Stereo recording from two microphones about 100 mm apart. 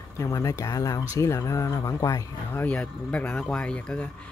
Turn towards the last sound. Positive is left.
turn(degrees=10)  # may be behind; listen again after turning